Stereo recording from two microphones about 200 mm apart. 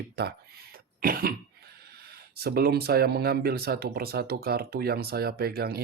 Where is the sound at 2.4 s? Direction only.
50° right (ahead or behind).